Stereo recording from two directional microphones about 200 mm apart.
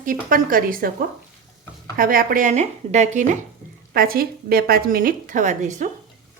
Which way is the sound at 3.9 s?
45° right (ahead or behind).